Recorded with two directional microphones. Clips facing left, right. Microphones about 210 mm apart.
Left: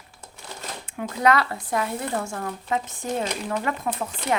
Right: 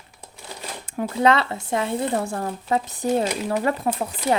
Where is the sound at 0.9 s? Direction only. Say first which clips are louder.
Right 2 dB; 30° right (ahead or behind).